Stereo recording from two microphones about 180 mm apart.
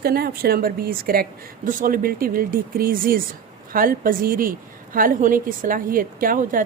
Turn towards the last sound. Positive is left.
turn(degrees=-50)  # may be behind; listen again after turning